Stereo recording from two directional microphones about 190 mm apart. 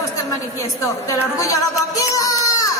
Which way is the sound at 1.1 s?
15° left (ahead or behind).